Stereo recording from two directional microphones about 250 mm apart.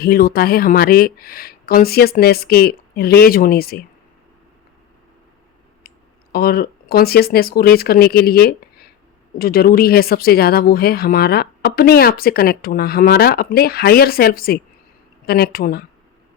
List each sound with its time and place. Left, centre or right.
0.0 s speech: left
6.3 s speech: left